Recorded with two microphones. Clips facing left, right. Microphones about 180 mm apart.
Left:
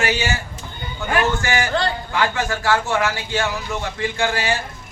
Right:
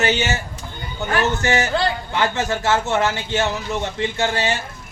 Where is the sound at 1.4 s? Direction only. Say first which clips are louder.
Right 2 dB; 25° right (ahead or behind).